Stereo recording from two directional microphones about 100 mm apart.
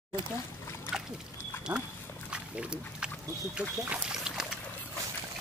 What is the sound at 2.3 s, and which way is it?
Speech, 10° right (ahead or behind).